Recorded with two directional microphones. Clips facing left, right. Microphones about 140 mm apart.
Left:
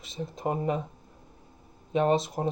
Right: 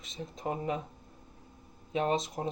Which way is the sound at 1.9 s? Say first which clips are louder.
Left 6 dB; 40° left (ahead or behind).